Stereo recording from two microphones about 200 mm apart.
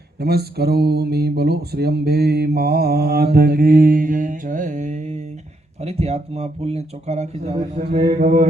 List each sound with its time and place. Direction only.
0.2 s mantra: 50° right (ahead or behind); by 5.2 s 35° right (ahead or behind)
5.8 s speech: 30° right (ahead or behind)